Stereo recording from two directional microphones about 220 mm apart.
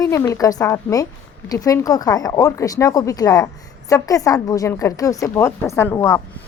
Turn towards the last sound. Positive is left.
turn(degrees=15)  # may be behind; listen again after turning